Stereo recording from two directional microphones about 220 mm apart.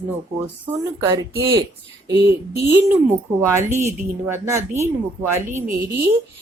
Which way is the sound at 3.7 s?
30° right (ahead or behind).